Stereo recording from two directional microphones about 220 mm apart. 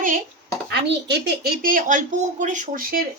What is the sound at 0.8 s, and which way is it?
Speech, 50° right (ahead or behind).